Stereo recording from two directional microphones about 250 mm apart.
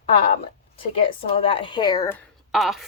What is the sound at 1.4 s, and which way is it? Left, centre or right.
Speech, left.